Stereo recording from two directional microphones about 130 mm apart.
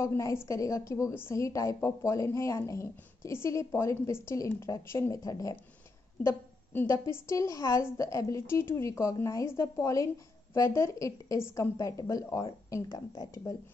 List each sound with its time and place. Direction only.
0.0 s a woman's voice: 20° left (ahead or behind)